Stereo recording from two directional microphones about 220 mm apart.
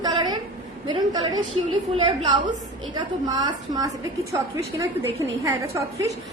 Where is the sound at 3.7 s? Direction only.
15° right (ahead or behind).